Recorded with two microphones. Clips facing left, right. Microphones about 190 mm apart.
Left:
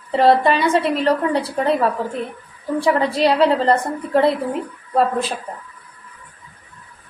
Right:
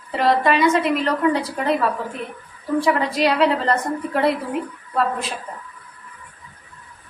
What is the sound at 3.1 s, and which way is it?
Speech, 30° left (ahead or behind).